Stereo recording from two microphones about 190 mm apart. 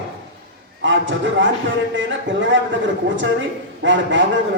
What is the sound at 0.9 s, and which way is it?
A man's voice, 80° right.